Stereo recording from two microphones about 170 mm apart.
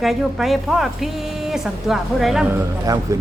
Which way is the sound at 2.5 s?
15° right (ahead or behind).